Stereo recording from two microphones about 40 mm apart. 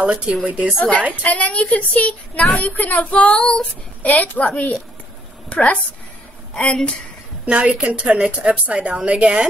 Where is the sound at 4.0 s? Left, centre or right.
Left.